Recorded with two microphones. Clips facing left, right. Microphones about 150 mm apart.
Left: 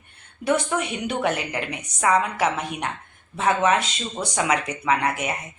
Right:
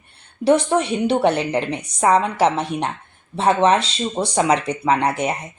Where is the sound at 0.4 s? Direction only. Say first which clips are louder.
Right 7 dB; 30° right (ahead or behind).